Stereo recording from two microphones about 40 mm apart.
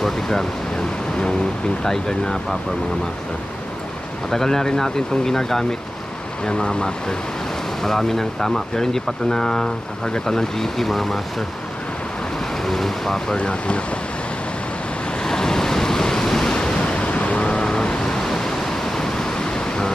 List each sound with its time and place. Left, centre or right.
0.0 s speech: centre
1.9 s speech: centre
4.3 s speech: centre
6.4 s speech: left; by 11.4 s centre
12.6 s speech: centre
13.4 s speech: left
15.2 s waves: centre; by 17.4 s left
17.4 s a sound: left